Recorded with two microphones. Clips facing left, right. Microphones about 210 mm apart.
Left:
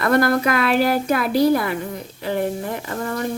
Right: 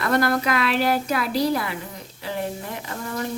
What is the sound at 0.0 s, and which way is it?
Speech, 55° left (ahead or behind).